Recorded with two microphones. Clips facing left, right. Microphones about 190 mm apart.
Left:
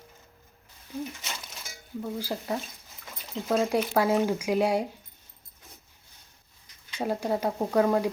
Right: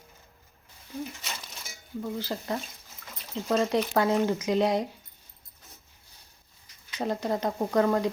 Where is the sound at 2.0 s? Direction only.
10° left (ahead or behind).